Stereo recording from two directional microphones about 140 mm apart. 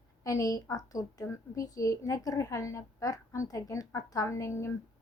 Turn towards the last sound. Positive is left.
turn(degrees=20)  # may be behind; listen again after turning